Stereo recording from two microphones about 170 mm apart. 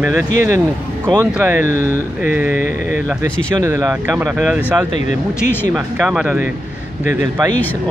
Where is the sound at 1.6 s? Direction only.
50° left (ahead or behind).